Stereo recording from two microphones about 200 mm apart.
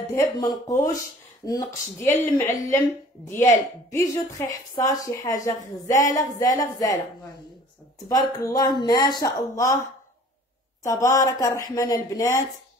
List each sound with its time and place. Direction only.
0.1 s a woman's voice: 15° left (ahead or behind)
8.1 s speech: 20° left (ahead or behind)
10.8 s a woman's voice: 15° left (ahead or behind)